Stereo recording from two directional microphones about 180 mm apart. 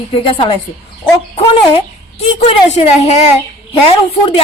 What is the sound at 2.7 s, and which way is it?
Speech, 35° left (ahead or behind).